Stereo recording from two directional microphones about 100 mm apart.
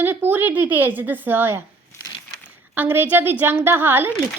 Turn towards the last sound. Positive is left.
turn(degrees=-20)  # may be behind; listen again after turning